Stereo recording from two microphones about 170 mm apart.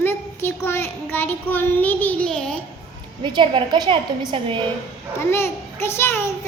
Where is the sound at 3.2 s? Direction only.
25° right (ahead or behind).